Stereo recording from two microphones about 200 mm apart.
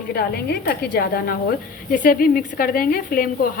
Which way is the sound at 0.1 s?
50° left (ahead or behind).